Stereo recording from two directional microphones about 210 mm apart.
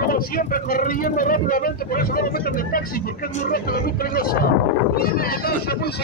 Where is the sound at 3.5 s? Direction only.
45° left (ahead or behind).